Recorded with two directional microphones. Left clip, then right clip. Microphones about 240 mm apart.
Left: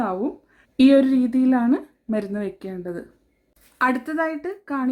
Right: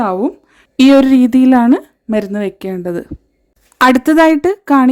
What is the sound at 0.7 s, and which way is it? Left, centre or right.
Speech, right.